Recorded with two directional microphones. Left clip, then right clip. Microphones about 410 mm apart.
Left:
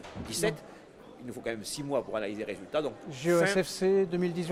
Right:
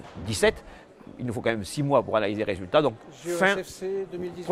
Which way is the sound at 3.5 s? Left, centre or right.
Left.